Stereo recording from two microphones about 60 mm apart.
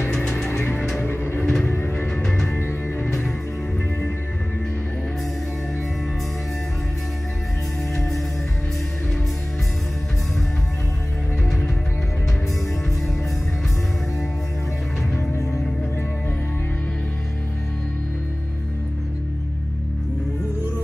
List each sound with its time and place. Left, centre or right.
0.5 s music: left
1.4 s music: centre
1.7 s music: left
3.1 s music: centre
7.9 s music: centre
15.1 s music: left